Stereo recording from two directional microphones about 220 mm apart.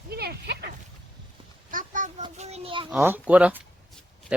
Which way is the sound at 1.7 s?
35° right (ahead or behind).